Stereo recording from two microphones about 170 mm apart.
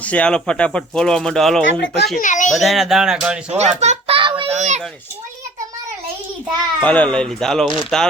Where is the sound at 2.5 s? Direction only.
Centre (ahead or behind).